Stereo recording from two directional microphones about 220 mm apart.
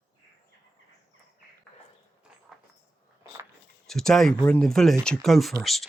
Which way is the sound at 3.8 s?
Centre (ahead or behind).